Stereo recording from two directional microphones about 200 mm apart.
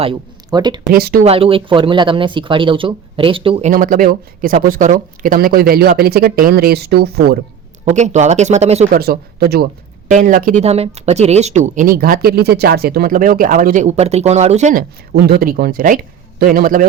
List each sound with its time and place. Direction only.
0.0 s speech: 25° right (ahead or behind)
0.9 s speech: 50° right (ahead or behind)
1.2 s speech: 30° right (ahead or behind)
3.7 s speech: 40° right (ahead or behind)
7.9 s speech: 35° right (ahead or behind)
9.0 s speech: 50° right (ahead or behind)